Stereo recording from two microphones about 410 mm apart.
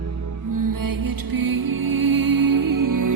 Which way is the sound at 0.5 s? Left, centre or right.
Right.